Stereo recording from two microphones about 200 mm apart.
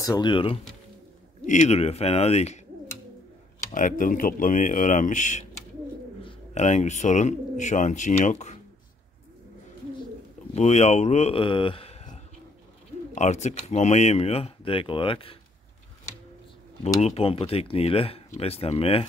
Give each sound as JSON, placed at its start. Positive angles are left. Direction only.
{"t": 0.0, "sound": "speech", "side_deg": 20}
{"t": 1.4, "sound": "speech", "side_deg": 35}
{"t": 3.7, "sound": "speech", "side_deg": 40}
{"t": 10.5, "sound": "speech", "side_deg": 30}
{"t": 17.0, "sound": "speech", "side_deg": 30}